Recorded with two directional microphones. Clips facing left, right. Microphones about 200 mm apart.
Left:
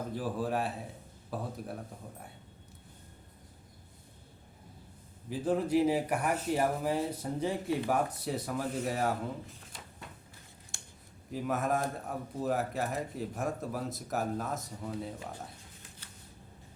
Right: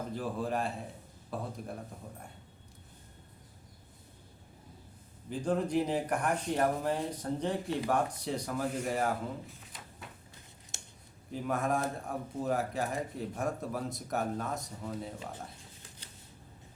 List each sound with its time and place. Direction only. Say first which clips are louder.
0.1 s speech: left 2 dB; 5° left (ahead or behind)
5.3 s speech: left 2 dB; 5° left (ahead or behind)
10.7 s a sound: right 3 dB; 20° right (ahead or behind)
11.3 s speech: even; centre (ahead or behind)